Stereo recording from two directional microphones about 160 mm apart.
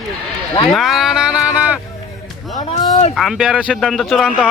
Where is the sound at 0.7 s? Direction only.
Centre (ahead or behind).